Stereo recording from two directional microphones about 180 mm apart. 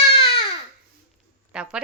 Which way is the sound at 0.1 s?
30° left (ahead or behind).